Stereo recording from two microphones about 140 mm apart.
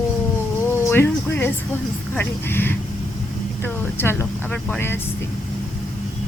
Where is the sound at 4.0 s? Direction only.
15° left (ahead or behind).